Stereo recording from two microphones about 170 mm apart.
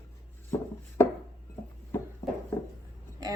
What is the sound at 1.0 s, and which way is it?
Chopping, 15° left (ahead or behind).